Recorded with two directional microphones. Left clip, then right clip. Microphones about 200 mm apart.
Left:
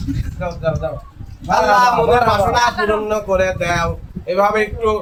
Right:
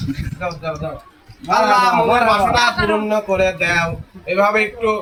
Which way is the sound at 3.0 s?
25° left (ahead or behind).